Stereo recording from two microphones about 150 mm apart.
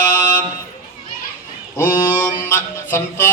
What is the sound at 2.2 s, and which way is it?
Music, 10° left (ahead or behind).